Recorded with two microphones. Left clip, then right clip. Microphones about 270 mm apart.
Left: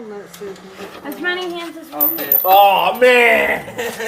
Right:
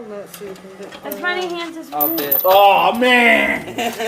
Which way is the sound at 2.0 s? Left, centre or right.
Right.